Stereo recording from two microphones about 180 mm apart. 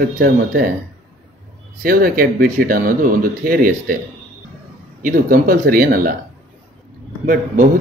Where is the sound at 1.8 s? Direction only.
55° right (ahead or behind).